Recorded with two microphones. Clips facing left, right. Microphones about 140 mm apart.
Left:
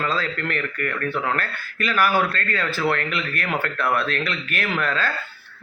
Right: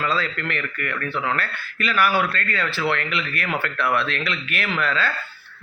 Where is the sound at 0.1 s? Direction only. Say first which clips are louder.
Even; 40° left (ahead or behind).